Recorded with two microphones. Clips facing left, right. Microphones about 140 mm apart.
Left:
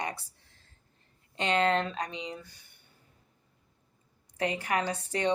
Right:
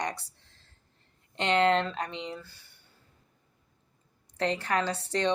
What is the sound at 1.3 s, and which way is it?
Speech, 70° right (ahead or behind).